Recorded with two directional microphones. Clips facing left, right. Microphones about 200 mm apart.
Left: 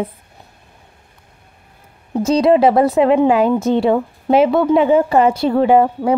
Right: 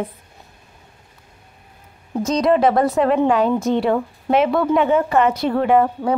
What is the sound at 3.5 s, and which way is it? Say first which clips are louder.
A woman's voice: left 3 dB; 30° left (ahead or behind).